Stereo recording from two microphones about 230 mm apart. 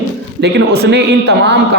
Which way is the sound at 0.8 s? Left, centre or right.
Right.